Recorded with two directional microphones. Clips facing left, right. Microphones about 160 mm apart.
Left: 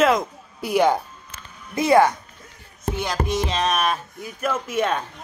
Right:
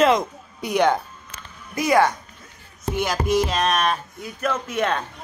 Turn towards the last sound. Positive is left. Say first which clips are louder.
# left 1 dB
turn(degrees=10)  # may be behind; listen again after turning